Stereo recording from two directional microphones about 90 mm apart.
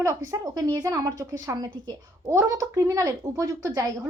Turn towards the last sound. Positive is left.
turn(degrees=-40)  # may be behind; listen again after turning